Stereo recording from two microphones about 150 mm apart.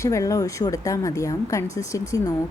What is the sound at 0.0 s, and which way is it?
A woman's voice, 20° left (ahead or behind).